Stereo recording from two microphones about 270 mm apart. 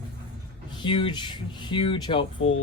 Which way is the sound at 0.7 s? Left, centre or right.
Centre.